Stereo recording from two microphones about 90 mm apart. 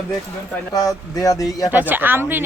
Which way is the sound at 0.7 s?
45° left (ahead or behind).